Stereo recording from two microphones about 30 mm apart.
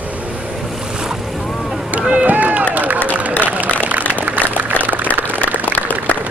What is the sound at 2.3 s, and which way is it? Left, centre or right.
Run, right.